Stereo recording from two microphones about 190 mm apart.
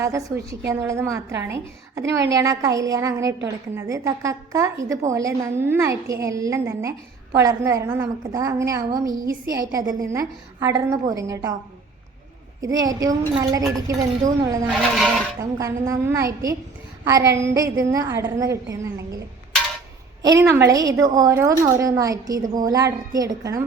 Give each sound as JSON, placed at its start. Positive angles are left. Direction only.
{"t": 0.0, "sound": "a woman's voice", "side_deg": -15}
{"t": 12.6, "sound": "a woman's voice", "side_deg": -20}
{"t": 20.2, "sound": "a woman's voice", "side_deg": -15}